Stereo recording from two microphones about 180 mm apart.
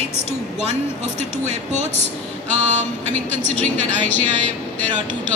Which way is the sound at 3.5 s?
10° left (ahead or behind).